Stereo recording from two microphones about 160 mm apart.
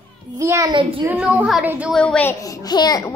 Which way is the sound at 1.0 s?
10° right (ahead or behind).